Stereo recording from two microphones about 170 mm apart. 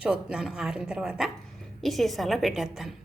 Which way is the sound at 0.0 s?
5° right (ahead or behind).